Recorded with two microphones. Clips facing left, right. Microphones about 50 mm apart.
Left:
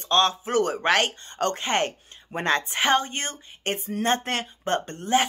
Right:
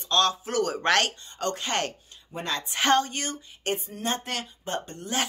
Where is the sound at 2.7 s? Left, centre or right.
Centre.